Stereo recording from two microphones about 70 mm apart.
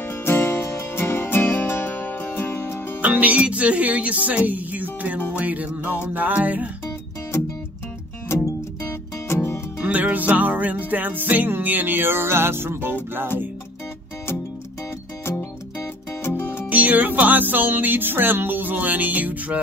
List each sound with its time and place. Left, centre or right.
0.0 s music: left
3.0 s music: right
9.3 s music: left
9.8 s music: centre
16.2 s music: left
16.6 s music: right